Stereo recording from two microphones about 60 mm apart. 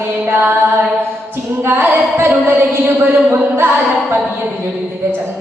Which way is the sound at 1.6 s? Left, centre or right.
Right.